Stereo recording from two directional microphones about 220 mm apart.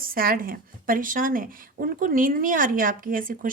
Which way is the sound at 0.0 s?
40° right (ahead or behind).